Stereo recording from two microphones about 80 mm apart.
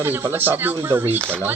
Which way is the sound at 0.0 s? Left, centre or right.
Right.